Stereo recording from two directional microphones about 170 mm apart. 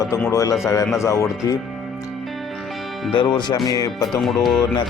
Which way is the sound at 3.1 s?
25° left (ahead or behind).